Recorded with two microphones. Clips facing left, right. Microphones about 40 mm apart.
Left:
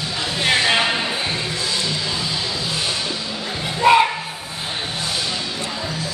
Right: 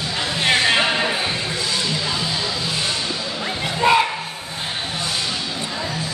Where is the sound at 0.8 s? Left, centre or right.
Centre.